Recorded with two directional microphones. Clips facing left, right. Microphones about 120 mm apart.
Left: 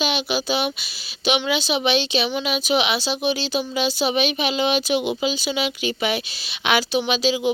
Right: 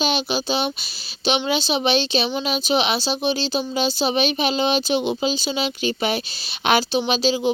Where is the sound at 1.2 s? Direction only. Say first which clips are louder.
Even; 30° right (ahead or behind).